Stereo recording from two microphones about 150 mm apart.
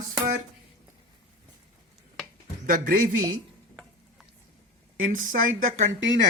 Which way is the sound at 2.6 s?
65° right (ahead or behind).